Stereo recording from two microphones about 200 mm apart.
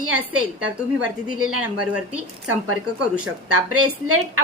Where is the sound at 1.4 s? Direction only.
90° right.